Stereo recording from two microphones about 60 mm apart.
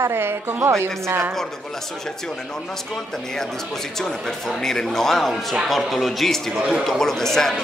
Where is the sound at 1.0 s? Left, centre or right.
Right.